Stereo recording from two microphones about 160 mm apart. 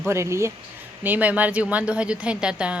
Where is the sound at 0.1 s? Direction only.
15° right (ahead or behind).